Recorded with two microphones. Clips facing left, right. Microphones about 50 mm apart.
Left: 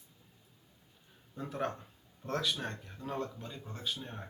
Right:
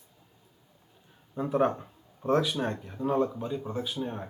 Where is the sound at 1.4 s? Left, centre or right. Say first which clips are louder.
Right 11 dB; centre.